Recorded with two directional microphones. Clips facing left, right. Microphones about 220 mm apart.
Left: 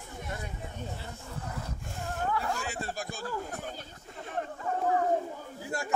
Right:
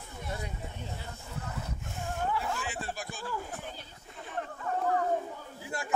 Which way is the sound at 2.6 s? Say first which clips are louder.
Left 2 dB; 40° left (ahead or behind).